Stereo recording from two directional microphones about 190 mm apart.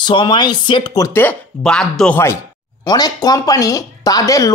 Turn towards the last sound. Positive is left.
turn(degrees=20)  # may be behind; listen again after turning